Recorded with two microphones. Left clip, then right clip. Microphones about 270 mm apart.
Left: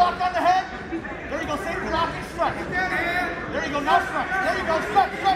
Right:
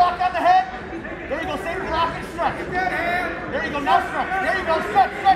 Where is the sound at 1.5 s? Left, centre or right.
Right.